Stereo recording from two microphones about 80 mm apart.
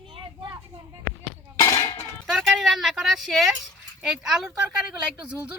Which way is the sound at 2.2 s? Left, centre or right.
Centre.